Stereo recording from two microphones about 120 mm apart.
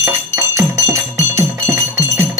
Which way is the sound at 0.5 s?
25° right (ahead or behind).